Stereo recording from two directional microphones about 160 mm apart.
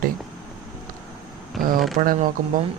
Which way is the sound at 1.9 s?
55° right (ahead or behind).